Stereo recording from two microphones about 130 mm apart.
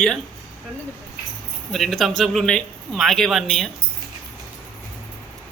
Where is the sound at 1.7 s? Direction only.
Centre (ahead or behind).